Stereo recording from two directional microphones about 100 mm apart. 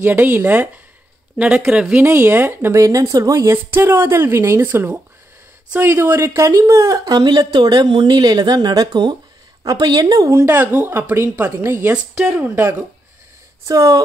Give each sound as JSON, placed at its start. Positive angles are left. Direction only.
{"t": 0.0, "sound": "speech", "side_deg": -20}
{"t": 1.6, "sound": "speech", "side_deg": -5}
{"t": 2.0, "sound": "speech", "side_deg": -25}
{"t": 3.5, "sound": "speech", "side_deg": -20}
{"t": 10.4, "sound": "speech", "side_deg": -20}
{"t": 11.9, "sound": "speech", "side_deg": -10}
{"t": 12.4, "sound": "speech", "side_deg": -25}
{"t": 13.7, "sound": "speech", "side_deg": -35}